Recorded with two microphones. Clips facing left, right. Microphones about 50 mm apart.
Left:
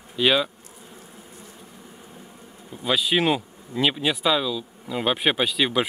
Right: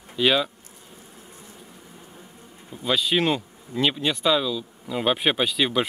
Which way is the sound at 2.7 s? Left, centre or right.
Centre.